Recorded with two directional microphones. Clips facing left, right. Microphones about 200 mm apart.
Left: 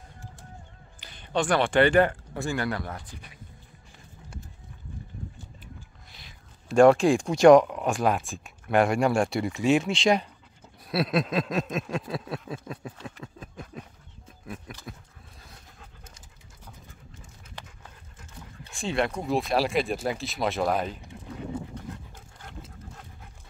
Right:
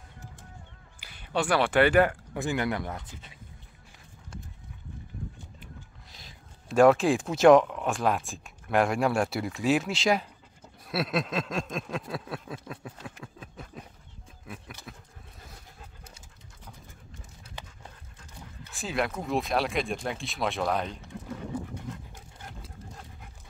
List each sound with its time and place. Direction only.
1.0 s speech: 10° right (ahead or behind)
2.3 s speech: 20° right (ahead or behind)
6.7 s speech: 5° right (ahead or behind)
18.7 s speech: 5° right (ahead or behind)